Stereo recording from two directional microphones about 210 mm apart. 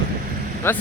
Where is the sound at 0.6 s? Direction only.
10° left (ahead or behind).